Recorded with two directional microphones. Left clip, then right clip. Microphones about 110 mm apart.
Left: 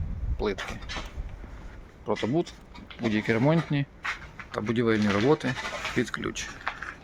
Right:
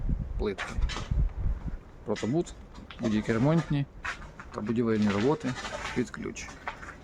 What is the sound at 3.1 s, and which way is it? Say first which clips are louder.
Speech: left 3 dB; 5° right (ahead or behind).